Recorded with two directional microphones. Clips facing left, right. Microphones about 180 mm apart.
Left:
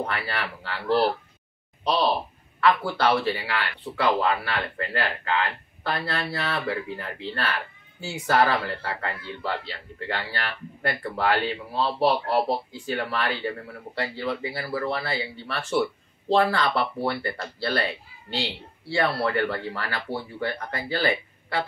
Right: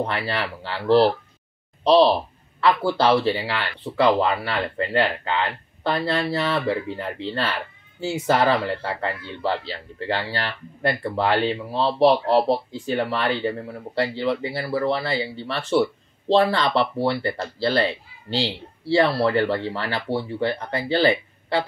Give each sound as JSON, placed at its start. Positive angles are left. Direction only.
{"t": 0.0, "sound": "speech", "side_deg": -25}